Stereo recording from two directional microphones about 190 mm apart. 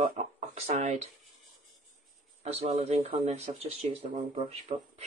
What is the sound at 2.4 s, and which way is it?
Speech, 35° right (ahead or behind).